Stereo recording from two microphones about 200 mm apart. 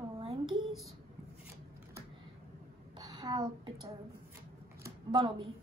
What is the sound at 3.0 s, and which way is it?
Speech, 20° right (ahead or behind).